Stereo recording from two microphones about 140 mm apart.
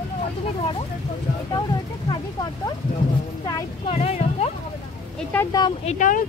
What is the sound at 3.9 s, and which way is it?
Speech, 50° left (ahead or behind).